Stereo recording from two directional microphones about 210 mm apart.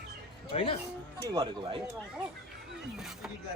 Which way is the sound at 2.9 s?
Centre (ahead or behind).